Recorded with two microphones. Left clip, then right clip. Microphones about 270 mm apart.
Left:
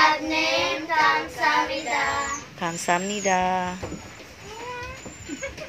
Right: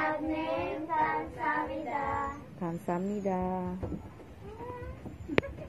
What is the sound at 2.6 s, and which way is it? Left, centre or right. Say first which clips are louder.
Speech: left 11 dB; centre.